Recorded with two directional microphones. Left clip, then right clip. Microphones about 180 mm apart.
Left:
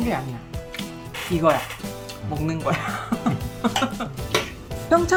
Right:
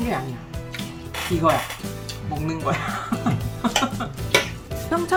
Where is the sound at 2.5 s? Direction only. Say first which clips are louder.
Even; 55° left (ahead or behind).